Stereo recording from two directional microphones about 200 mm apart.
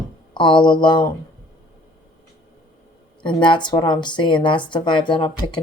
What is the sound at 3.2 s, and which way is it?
Speech, 25° left (ahead or behind).